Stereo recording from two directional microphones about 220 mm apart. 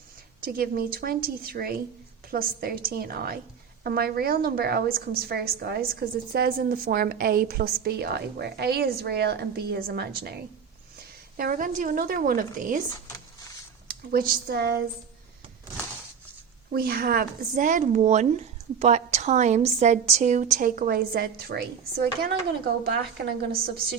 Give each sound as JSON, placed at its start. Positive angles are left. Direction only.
{"t": 0.4, "sound": "a woman's voice", "side_deg": -40}
{"t": 11.3, "sound": "a woman's voice", "side_deg": -40}
{"t": 13.8, "sound": "speech", "side_deg": -40}
{"t": 16.7, "sound": "a woman's voice", "side_deg": -40}